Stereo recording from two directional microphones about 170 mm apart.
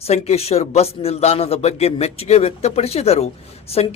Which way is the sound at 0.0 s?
40° left (ahead or behind).